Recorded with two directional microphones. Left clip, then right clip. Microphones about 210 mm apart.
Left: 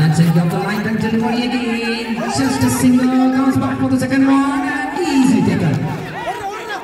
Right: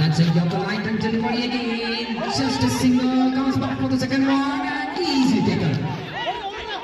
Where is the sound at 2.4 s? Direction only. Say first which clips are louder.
Left 6 dB; 45° left (ahead or behind).